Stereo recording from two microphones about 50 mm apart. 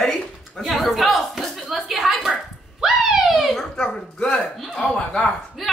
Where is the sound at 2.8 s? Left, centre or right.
Centre.